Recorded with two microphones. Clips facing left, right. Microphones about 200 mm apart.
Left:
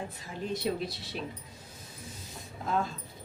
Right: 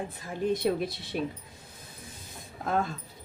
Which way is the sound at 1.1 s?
50° right (ahead or behind).